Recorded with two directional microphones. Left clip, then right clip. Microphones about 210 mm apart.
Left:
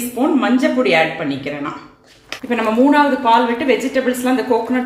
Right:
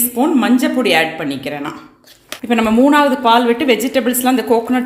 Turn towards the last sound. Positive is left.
turn(degrees=-45)  # may be behind; listen again after turning